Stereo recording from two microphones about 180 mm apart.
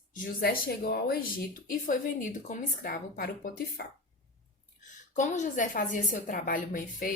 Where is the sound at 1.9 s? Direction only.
45° left (ahead or behind).